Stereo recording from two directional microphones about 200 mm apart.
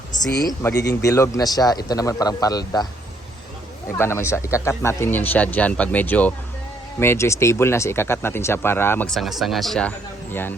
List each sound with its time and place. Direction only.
0.4 s a man's voice: 10° left (ahead or behind)
3.9 s speech: 10° left (ahead or behind)